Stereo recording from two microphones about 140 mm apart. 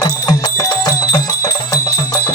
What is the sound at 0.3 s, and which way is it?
Music, 25° left (ahead or behind).